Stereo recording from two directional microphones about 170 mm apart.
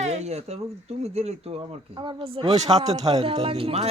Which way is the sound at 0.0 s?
40° right (ahead or behind).